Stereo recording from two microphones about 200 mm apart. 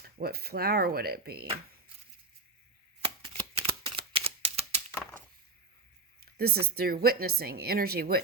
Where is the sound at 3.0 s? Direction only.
25° right (ahead or behind).